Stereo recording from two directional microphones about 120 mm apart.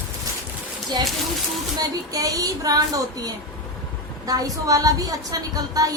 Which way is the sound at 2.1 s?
30° right (ahead or behind).